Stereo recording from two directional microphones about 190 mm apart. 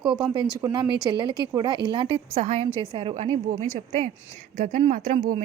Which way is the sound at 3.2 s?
40° right (ahead or behind).